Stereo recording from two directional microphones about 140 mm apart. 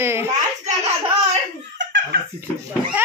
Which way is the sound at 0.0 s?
20° right (ahead or behind).